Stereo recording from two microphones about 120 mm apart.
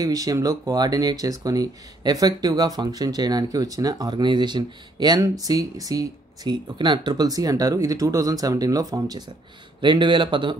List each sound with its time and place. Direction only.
0.0 s speech: 30° right (ahead or behind)